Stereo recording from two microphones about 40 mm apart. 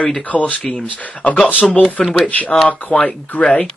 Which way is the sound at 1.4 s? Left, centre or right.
Left.